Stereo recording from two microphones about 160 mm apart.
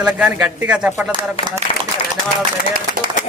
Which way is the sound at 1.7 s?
35° left (ahead or behind).